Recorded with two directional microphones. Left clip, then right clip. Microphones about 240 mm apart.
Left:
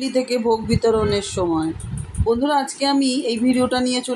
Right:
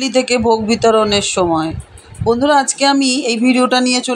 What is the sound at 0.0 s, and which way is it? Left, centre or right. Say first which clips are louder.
Speech: right 6 dB; right.